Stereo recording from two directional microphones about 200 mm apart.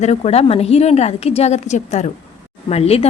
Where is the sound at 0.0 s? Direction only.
35° left (ahead or behind).